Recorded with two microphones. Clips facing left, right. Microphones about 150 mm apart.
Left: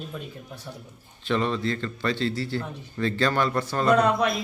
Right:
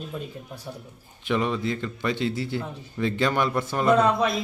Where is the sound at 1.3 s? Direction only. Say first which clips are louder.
Even; 10° right (ahead or behind).